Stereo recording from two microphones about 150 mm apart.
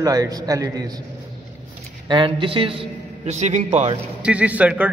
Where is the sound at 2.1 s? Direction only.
35° right (ahead or behind); by 3.6 s 50° right (ahead or behind).